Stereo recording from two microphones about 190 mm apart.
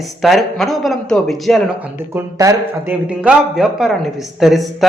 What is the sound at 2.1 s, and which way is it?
Speech, 15° right (ahead or behind).